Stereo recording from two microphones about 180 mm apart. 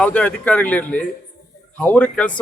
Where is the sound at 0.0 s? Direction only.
5° left (ahead or behind).